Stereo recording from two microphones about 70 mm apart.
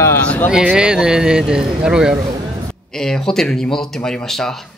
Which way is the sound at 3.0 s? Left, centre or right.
Centre.